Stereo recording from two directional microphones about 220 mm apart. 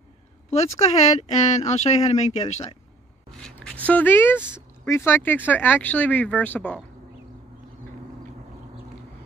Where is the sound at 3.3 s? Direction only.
5° left (ahead or behind).